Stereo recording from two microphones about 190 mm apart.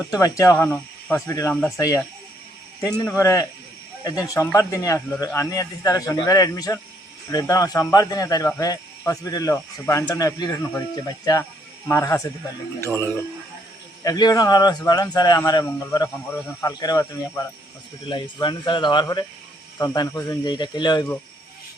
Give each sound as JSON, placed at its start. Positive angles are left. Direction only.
{"t": 0.1, "sound": "speech", "side_deg": 15}
{"t": 3.2, "sound": "speech", "side_deg": 15}
{"t": 4.5, "sound": "speech", "side_deg": 15}